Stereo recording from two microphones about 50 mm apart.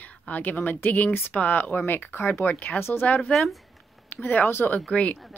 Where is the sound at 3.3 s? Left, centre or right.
Left.